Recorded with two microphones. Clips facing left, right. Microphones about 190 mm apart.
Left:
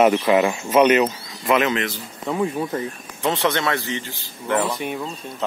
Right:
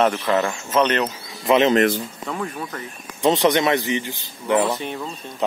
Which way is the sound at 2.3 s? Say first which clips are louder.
Left 7 dB; 20° left (ahead or behind).